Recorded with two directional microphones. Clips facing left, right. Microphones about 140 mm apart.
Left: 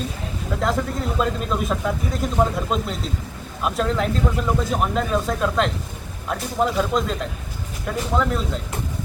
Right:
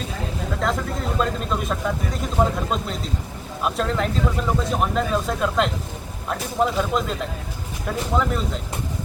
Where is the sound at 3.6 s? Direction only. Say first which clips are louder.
Left 1 dB; centre (ahead or behind).